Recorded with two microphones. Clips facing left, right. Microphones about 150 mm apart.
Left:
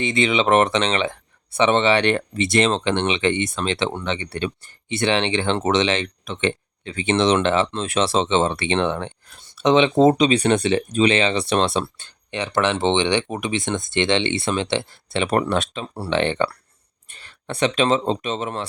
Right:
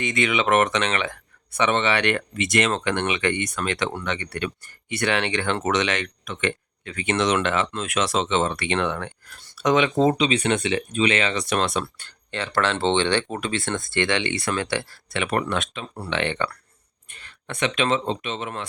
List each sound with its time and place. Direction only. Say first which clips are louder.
0.0 s speech: left 3 dB; 25° left (ahead or behind)